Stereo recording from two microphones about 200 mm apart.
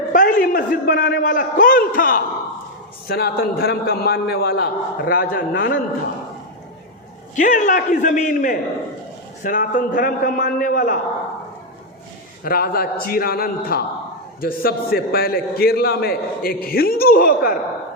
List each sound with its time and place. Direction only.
0.1 s a man's voice: 40° left (ahead or behind)
7.3 s a man's voice: 40° left (ahead or behind)
12.5 s a man's voice: 50° left (ahead or behind)